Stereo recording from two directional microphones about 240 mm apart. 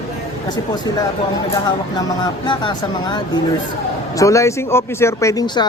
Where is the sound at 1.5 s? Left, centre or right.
Centre.